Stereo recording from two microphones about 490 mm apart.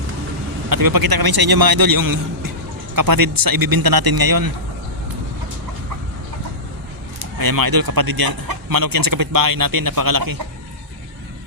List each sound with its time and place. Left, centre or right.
0.7 s speech: right
7.2 s speech: right